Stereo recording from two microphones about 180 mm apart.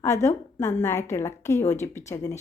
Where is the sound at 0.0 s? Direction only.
15° left (ahead or behind).